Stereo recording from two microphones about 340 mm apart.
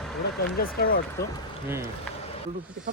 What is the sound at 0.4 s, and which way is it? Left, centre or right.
Speech, left.